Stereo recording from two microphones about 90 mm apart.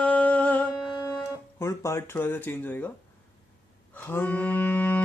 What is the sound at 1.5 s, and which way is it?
Music, 30° left (ahead or behind).